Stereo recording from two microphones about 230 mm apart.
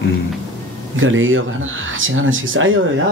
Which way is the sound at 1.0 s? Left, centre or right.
Right.